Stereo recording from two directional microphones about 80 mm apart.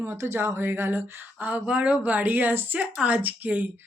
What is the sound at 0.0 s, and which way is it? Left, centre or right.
Speech, right.